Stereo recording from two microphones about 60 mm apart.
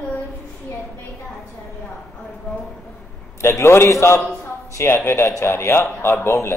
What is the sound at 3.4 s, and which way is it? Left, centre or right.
A man's voice, left.